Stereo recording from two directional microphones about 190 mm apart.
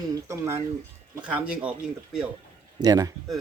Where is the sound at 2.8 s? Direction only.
20° right (ahead or behind).